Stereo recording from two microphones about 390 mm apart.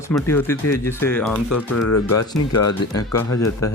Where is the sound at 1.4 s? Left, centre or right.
Left.